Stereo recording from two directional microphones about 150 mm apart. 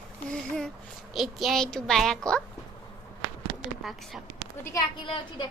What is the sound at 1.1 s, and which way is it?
A woman's voice, centre (ahead or behind).